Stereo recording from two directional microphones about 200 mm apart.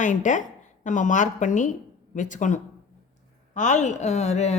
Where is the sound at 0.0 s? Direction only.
40° left (ahead or behind).